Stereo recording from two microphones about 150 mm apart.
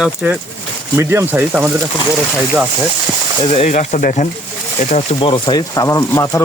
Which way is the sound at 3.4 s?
45° left (ahead or behind).